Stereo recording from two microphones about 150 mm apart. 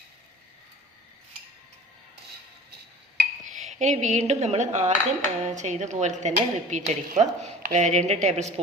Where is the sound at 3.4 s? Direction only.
50° right (ahead or behind).